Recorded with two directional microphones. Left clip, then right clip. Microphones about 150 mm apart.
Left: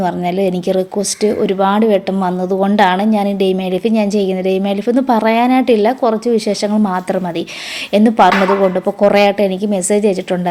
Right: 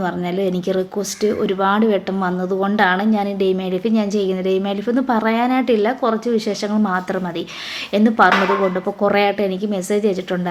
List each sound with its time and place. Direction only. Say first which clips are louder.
0.0 s speech: left 5 dB; 35° left (ahead or behind)